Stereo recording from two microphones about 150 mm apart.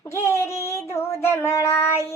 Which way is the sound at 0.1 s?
20° left (ahead or behind).